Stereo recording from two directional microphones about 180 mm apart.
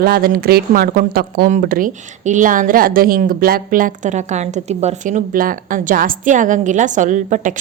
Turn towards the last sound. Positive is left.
turn(degrees=-45)  # may be behind; listen again after turning